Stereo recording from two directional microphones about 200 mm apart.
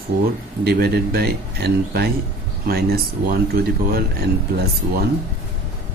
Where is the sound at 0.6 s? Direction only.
50° right (ahead or behind).